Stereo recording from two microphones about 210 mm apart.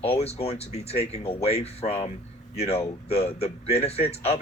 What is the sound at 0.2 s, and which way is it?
Speech, 30° left (ahead or behind).